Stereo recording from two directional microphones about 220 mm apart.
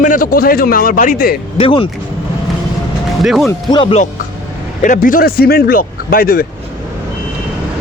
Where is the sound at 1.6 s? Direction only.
25° left (ahead or behind).